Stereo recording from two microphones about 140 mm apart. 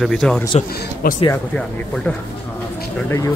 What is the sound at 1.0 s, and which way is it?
Speech, 90° left.